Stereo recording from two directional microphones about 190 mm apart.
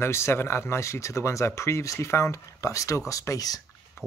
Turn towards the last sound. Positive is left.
turn(degrees=15)  # may be behind; listen again after turning